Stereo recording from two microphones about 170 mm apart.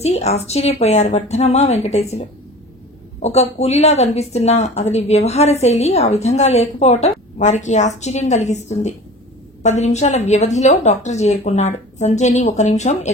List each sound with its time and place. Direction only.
0.0 s a woman's voice: 40° left (ahead or behind)